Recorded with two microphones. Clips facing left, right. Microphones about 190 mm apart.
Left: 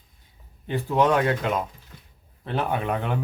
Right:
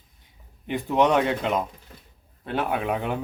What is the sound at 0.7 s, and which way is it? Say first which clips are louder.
Speech: even; 20° right (ahead or behind).